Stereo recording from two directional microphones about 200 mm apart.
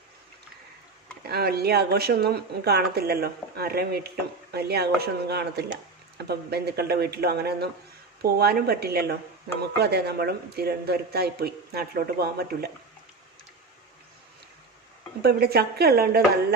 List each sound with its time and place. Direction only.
1.3 s speech: 50° right (ahead or behind)
15.2 s speech: 55° right (ahead or behind)